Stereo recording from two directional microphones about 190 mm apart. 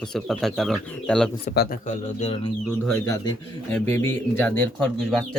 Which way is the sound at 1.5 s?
45° left (ahead or behind).